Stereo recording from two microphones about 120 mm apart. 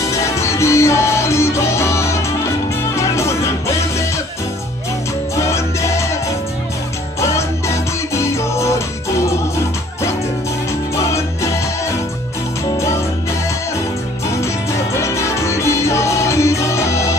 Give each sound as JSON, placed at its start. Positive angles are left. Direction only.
{"t": 0.2, "sound": "music", "side_deg": 25}
{"t": 5.3, "sound": "music", "side_deg": 25}
{"t": 7.2, "sound": "music", "side_deg": 25}
{"t": 11.0, "sound": "music", "side_deg": 25}
{"t": 15.0, "sound": "music", "side_deg": 25}